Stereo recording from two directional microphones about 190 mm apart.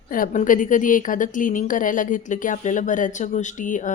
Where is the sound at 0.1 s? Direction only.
45° left (ahead or behind).